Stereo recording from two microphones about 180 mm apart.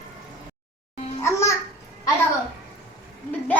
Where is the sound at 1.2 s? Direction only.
15° left (ahead or behind).